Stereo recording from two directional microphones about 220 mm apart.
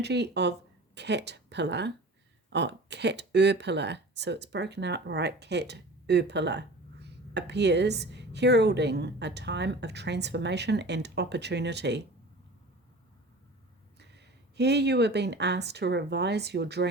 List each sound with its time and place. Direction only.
0.0 s speech: 50° right (ahead or behind)
14.0 s speech: 50° right (ahead or behind)